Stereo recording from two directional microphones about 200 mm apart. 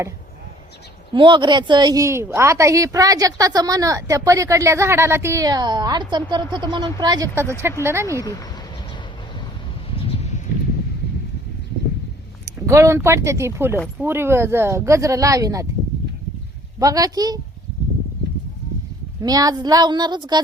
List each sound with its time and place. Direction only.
1.1 s speech: 25° right (ahead or behind)
8.2 s speech: 20° left (ahead or behind)
9.9 s a sound: 30° left (ahead or behind)
12.5 s speech: 15° right (ahead or behind)
16.8 s speech: 20° right (ahead or behind)
19.2 s a woman's voice: 20° right (ahead or behind)